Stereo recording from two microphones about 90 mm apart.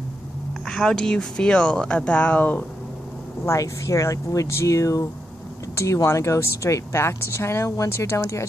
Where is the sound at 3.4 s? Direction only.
35° left (ahead or behind).